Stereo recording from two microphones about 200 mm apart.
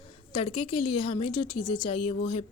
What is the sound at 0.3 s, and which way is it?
A woman's voice, 25° left (ahead or behind).